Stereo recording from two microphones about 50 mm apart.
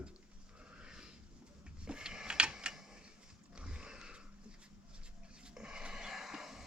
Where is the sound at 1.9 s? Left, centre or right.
Centre.